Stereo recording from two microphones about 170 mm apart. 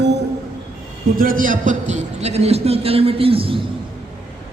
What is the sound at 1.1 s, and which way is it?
A man's voice, 55° right (ahead or behind).